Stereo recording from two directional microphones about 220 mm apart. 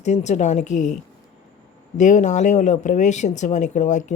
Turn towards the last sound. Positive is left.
turn(degrees=35)  # may be behind; listen again after turning